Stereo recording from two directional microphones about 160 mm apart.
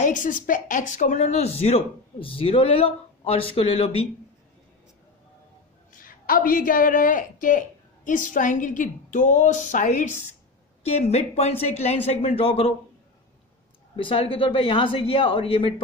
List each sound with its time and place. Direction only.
0.0 s speech: 55° left (ahead or behind); by 4.1 s 35° left (ahead or behind)
5.9 s a woman's voice: 60° left (ahead or behind); by 12.7 s 40° left (ahead or behind)
13.9 s speech: 35° left (ahead or behind)